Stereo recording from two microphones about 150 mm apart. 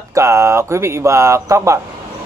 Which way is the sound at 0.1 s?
20° right (ahead or behind).